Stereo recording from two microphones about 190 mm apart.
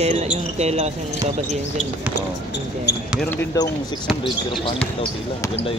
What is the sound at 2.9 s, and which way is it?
Speech, 60° left (ahead or behind).